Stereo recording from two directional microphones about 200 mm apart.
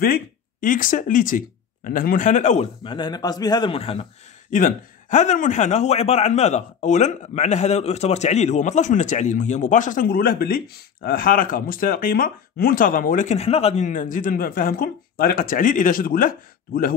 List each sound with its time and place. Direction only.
0.0 s a man's voice: 45° left (ahead or behind)